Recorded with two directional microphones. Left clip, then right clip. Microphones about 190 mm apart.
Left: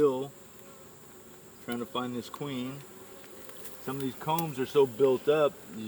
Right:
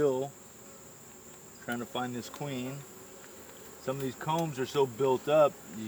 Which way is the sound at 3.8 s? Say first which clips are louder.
Left 1 dB; 15° right (ahead or behind).